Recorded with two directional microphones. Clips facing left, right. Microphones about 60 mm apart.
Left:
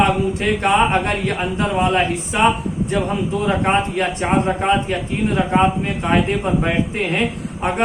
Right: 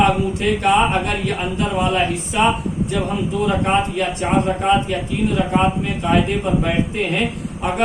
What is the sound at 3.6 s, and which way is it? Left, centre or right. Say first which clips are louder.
A man's voice: even; left.